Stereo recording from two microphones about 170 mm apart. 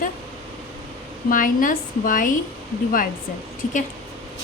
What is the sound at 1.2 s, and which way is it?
A woman's voice, 55° left (ahead or behind).